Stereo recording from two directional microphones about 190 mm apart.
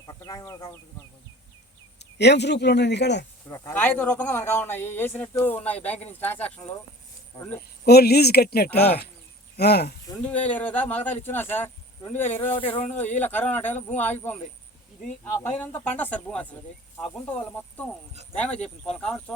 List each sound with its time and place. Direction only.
0.1 s speech: 20° left (ahead or behind)
2.0 s a man's voice: 65° left (ahead or behind)
3.5 s a man's voice: 15° left (ahead or behind)
7.9 s a man's voice: 55° left (ahead or behind)
10.2 s a man's voice: 5° left (ahead or behind)
12.4 s a man's voice: 25° left (ahead or behind)
13.1 s a man's voice: 10° left (ahead or behind)